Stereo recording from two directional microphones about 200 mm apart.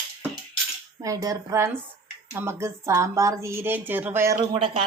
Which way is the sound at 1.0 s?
15° right (ahead or behind).